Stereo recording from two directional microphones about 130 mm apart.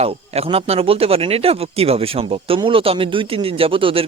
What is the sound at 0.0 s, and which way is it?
Speech, 50° right (ahead or behind).